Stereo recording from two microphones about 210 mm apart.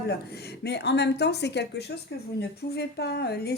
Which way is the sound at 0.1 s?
50° left (ahead or behind).